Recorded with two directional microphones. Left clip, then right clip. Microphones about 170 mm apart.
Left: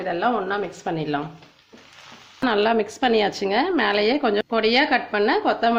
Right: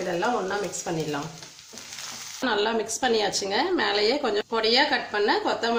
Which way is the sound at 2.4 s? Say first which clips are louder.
Left 5 dB; 35° left (ahead or behind).